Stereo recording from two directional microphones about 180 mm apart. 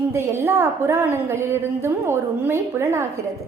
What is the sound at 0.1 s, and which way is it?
A woman's voice, 15° right (ahead or behind).